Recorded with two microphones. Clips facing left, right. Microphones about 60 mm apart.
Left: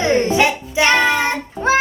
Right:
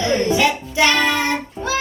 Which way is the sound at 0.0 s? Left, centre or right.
Left.